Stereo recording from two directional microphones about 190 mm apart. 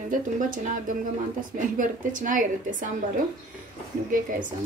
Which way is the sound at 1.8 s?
45° right (ahead or behind).